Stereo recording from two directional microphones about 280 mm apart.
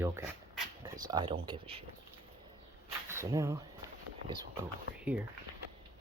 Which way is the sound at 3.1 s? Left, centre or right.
Centre.